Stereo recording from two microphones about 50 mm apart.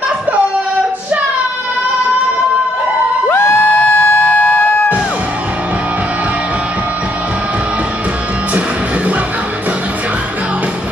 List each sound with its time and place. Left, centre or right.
3.3 s crowd: left
3.6 s music: left